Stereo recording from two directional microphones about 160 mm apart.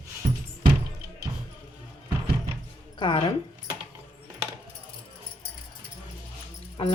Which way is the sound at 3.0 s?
30° left (ahead or behind).